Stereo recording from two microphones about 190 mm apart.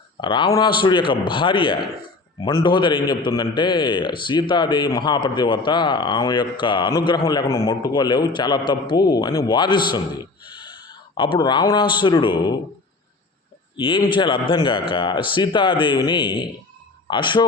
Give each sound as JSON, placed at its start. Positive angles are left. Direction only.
{"t": 0.2, "sound": "a man's voice", "side_deg": 25}
{"t": 13.7, "sound": "a man's voice", "side_deg": 25}